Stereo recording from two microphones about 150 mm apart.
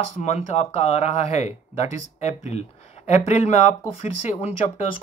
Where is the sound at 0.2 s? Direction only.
50° left (ahead or behind).